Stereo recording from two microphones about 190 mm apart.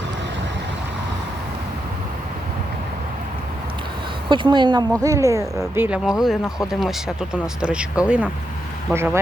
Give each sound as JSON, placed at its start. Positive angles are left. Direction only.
{"t": 4.3, "sound": "speech", "side_deg": -25}